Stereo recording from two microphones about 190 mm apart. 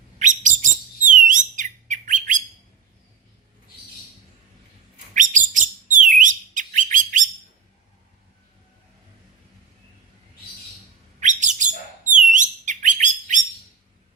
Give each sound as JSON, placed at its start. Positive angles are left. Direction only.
{"t": 0.2, "sound": "bird", "side_deg": -40}
{"t": 5.1, "sound": "bird", "side_deg": -40}
{"t": 11.2, "sound": "bird", "side_deg": -40}